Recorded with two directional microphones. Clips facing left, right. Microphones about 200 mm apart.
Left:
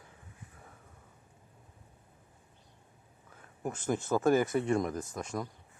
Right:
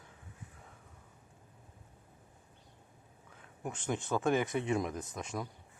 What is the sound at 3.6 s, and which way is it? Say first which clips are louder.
Speech: left 4 dB; 5° left (ahead or behind).